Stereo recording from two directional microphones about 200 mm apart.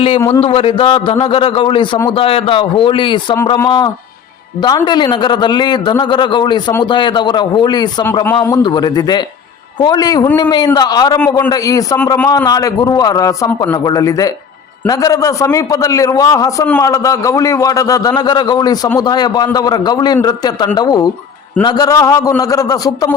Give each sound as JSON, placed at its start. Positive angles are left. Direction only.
{"t": 0.4, "sound": "a man's voice", "side_deg": 30}